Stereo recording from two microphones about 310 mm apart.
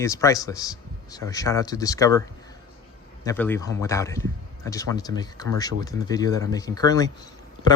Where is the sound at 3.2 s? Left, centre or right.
Centre.